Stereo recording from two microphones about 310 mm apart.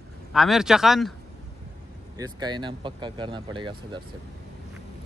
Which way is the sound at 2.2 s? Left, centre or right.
Centre.